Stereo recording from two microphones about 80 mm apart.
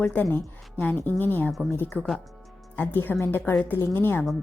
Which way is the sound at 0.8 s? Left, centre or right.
Left.